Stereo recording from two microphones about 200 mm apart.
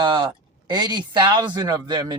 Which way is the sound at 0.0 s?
25° right (ahead or behind).